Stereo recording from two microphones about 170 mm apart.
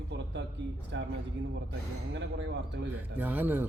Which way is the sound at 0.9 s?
90° right.